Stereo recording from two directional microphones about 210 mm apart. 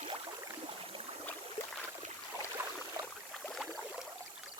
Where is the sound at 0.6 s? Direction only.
25° right (ahead or behind).